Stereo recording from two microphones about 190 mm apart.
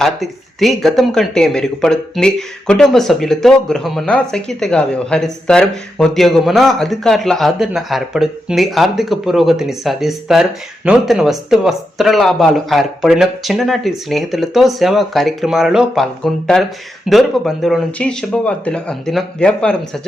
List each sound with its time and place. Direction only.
0.0 s speech: centre (ahead or behind)